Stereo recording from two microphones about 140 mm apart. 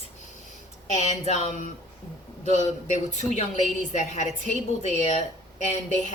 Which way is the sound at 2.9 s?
60° left (ahead or behind).